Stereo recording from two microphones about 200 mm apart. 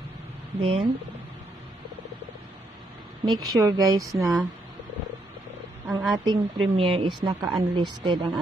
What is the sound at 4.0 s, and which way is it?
Speech, centre (ahead or behind).